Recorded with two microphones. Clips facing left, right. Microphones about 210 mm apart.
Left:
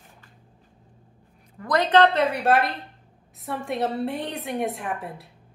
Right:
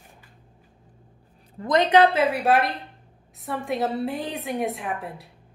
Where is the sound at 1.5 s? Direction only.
20° right (ahead or behind).